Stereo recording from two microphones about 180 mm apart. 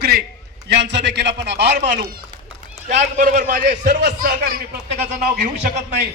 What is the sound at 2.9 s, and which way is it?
A man's voice, 40° right (ahead or behind).